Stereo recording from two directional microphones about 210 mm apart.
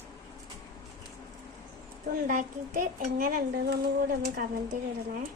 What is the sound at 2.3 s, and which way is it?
Speech, 40° right (ahead or behind).